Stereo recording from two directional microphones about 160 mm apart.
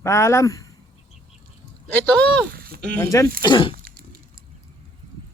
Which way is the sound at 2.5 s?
70° right (ahead or behind).